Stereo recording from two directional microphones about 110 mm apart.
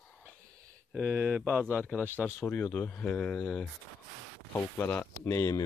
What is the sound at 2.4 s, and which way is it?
Speech, 10° left (ahead or behind).